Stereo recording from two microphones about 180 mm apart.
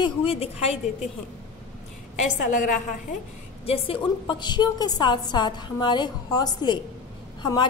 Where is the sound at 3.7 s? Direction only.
30° left (ahead or behind).